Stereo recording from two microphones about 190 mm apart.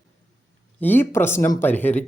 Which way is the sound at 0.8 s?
10° left (ahead or behind).